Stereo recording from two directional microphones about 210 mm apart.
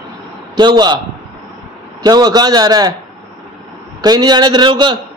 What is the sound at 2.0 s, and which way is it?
Speech, 20° right (ahead or behind).